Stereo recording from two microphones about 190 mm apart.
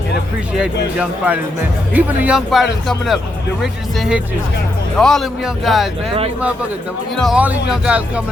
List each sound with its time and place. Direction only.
0.9 s a man's voice: 10° right (ahead or behind)
7.2 s a man's voice: 5° right (ahead or behind)